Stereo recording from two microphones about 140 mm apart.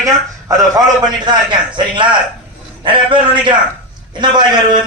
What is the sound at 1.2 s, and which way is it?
A man's voice, 35° right (ahead or behind).